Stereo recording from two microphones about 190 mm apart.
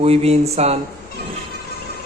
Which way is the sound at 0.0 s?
35° right (ahead or behind).